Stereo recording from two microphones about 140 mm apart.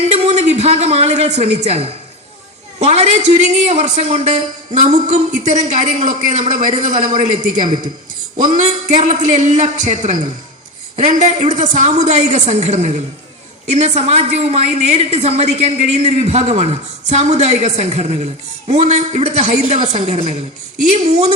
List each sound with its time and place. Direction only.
0.1 s a woman's voice: 50° right (ahead or behind)
8.5 s a man's voice: 60° right (ahead or behind)